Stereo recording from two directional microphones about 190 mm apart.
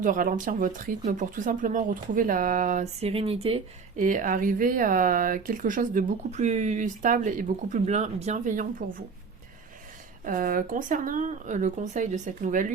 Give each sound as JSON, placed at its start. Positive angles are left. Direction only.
{"t": 0.0, "sound": "speech", "side_deg": -45}
{"t": 3.1, "sound": "speech", "side_deg": -30}
{"t": 4.0, "sound": "speech", "side_deg": -45}
{"t": 10.2, "sound": "speech", "side_deg": -45}